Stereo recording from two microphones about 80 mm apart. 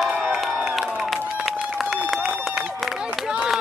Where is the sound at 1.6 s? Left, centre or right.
Centre.